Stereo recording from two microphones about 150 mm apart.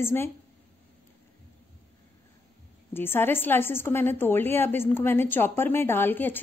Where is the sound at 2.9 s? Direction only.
15° left (ahead or behind).